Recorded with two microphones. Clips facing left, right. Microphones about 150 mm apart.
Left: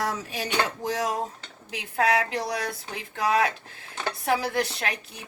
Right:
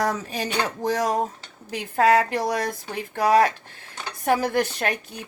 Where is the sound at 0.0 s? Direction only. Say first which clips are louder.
Right 4 dB; 45° right (ahead or behind).